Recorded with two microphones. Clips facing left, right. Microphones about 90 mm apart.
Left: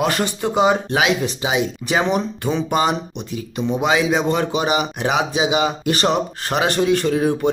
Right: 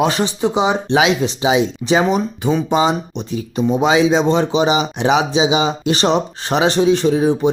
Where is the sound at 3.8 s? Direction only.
30° right (ahead or behind).